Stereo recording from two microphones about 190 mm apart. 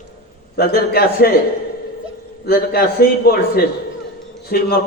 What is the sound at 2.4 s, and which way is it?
A man's voice, 55° left (ahead or behind).